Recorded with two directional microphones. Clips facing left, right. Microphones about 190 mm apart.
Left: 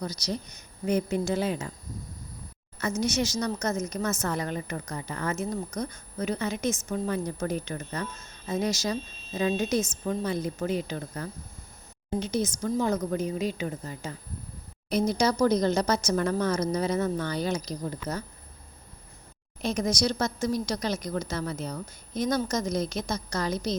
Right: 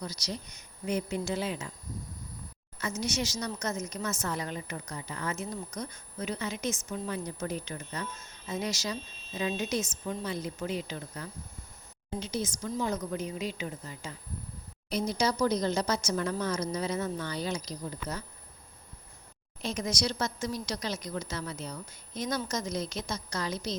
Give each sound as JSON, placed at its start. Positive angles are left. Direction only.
{"t": 0.9, "sound": "a woman's voice", "side_deg": 50}
{"t": 2.7, "sound": "a woman's voice", "side_deg": 55}
{"t": 19.6, "sound": "a woman's voice", "side_deg": 50}